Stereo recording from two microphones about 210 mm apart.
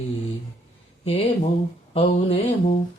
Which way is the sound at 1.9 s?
25° left (ahead or behind).